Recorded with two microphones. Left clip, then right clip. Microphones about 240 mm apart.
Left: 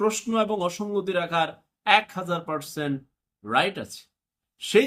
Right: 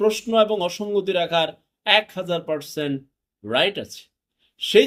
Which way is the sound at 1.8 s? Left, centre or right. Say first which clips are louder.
Right 2 dB; centre.